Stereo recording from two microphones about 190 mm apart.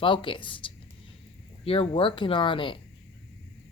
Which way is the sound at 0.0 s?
25° left (ahead or behind).